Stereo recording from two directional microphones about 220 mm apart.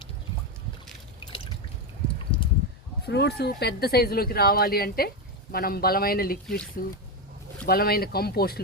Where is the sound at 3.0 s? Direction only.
50° left (ahead or behind).